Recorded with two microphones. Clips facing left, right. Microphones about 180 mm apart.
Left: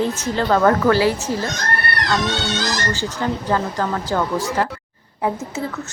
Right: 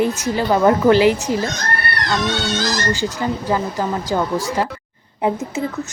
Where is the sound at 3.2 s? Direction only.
15° right (ahead or behind).